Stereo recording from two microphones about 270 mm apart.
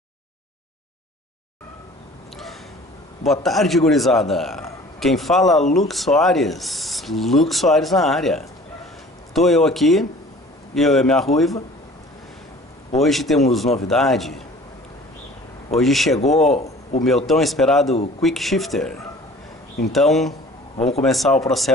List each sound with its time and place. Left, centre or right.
3.3 s speech: centre
13.0 s speech: centre
15.8 s speech: centre
16.2 s speech: left
16.5 s a sound: left
17.3 s speech: centre
20.7 s a man's voice: left
21.0 s speech: centre